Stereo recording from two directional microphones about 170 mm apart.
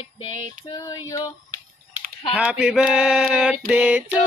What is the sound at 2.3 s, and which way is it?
A woman's voice, 5° right (ahead or behind).